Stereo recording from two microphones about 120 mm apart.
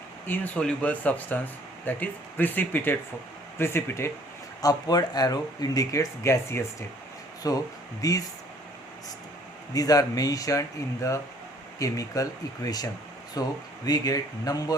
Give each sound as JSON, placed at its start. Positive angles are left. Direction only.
{"t": 0.3, "sound": "speech", "side_deg": 15}
{"t": 4.6, "sound": "speech", "side_deg": 30}
{"t": 9.7, "sound": "speech", "side_deg": 30}